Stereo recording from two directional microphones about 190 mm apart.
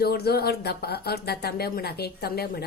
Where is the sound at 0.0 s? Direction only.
55° left (ahead or behind).